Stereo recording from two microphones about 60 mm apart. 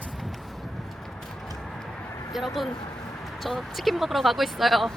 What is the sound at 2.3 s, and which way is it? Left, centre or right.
A woman's voice, centre.